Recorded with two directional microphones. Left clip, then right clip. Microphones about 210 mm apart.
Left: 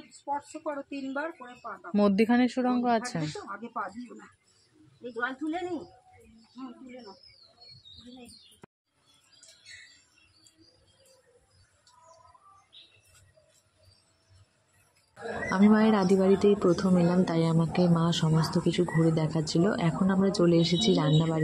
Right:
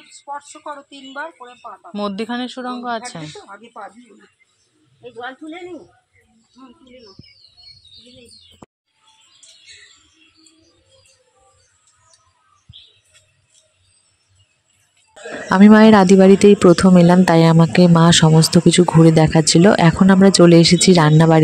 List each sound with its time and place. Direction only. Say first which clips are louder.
0.3 s speech: right 3 dB; 30° left (ahead or behind)
2.0 s speech: right 1 dB; 25° left (ahead or behind)
15.5 s speech: right 15 dB; 50° right (ahead or behind)